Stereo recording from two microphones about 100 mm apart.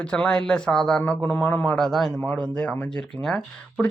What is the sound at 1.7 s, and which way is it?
A man's voice, 5° left (ahead or behind).